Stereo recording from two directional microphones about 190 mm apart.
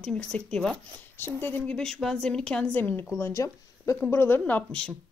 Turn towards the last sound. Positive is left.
turn(degrees=5)  # may be behind; listen again after turning